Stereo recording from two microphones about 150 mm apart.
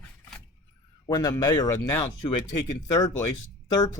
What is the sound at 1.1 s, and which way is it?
Speech, 25° left (ahead or behind).